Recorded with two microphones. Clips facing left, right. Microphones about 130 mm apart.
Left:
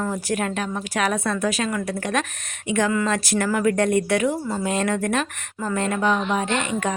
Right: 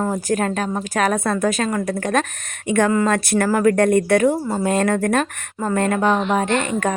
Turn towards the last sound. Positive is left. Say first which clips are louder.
# right 4 dB
turn(degrees=-50)  # may be behind; listen again after turning